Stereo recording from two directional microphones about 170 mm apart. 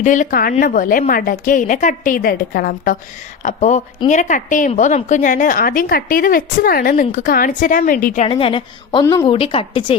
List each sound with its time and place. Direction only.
0.0 s a woman's voice: 50° left (ahead or behind)
3.4 s a woman's voice: 45° left (ahead or behind)
8.2 s a woman's voice: 30° left (ahead or behind)